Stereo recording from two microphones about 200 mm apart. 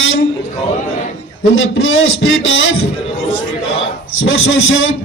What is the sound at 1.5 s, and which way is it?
A man's voice, 80° left.